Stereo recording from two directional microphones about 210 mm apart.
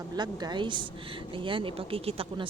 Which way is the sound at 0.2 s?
20° right (ahead or behind).